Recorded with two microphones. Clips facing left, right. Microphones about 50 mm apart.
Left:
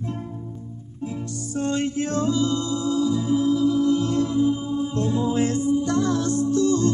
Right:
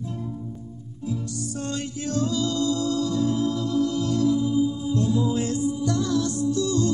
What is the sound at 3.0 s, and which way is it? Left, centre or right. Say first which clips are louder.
Music: left 2 dB; centre.